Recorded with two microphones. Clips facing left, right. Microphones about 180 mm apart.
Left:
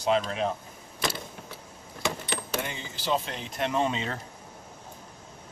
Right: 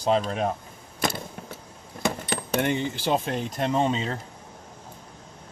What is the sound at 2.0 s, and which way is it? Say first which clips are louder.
Speech: right 4 dB; 55° right (ahead or behind).